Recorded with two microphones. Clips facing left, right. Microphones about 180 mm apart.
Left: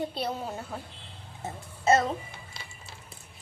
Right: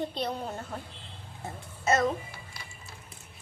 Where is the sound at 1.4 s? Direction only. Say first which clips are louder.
Left 4 dB; 25° left (ahead or behind).